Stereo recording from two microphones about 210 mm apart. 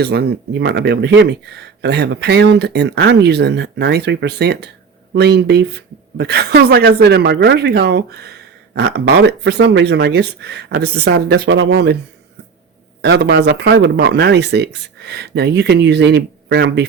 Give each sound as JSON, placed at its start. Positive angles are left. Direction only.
{"t": 0.0, "sound": "speech", "side_deg": -50}
{"t": 13.0, "sound": "speech", "side_deg": -50}